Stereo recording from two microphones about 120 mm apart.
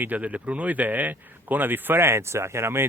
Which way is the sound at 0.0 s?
15° right (ahead or behind).